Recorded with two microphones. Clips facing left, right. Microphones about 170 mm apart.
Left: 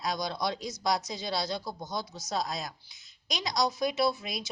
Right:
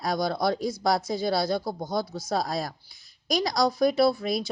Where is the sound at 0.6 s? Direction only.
20° left (ahead or behind).